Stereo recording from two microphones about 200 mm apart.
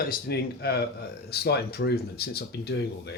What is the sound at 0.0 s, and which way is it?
Speech, 50° left (ahead or behind).